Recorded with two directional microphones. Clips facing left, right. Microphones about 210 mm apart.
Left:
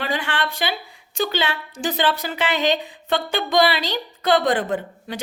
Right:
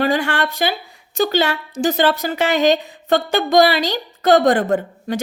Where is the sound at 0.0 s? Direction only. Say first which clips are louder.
Right 7 dB; 45° right (ahead or behind).